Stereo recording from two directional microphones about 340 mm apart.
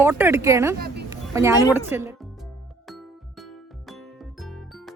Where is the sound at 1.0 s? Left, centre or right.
Centre.